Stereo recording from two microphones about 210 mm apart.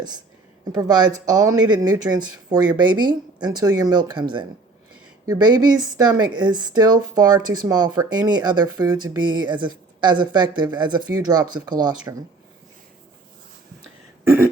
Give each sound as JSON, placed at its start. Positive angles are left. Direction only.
{"t": 0.7, "sound": "speech", "side_deg": -20}